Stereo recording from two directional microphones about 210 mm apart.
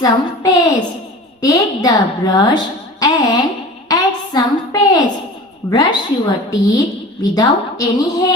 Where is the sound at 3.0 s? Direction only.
15° left (ahead or behind).